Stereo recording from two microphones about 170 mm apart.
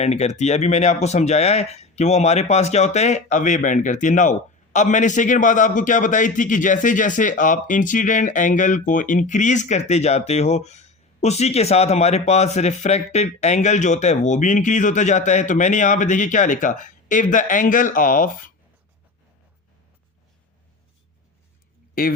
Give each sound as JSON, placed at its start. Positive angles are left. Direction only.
{"t": 0.0, "sound": "speech", "side_deg": 40}